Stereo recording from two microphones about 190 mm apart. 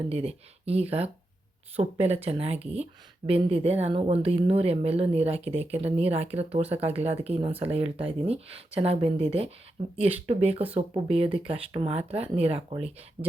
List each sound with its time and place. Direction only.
0.1 s speech: 30° right (ahead or behind)